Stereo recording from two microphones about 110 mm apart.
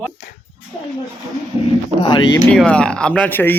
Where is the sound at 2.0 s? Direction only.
45° left (ahead or behind).